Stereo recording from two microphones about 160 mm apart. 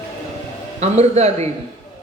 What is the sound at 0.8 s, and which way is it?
Speech, 40° right (ahead or behind).